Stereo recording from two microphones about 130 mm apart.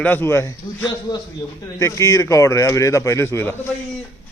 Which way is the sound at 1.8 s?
25° left (ahead or behind).